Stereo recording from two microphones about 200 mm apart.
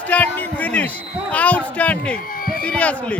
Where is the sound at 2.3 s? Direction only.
45° left (ahead or behind).